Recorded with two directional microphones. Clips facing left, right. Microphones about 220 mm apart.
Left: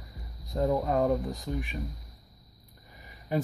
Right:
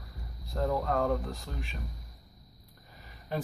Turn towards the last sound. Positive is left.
turn(degrees=15)  # may be behind; listen again after turning